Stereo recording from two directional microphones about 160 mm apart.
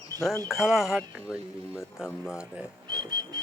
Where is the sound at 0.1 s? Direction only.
20° right (ahead or behind).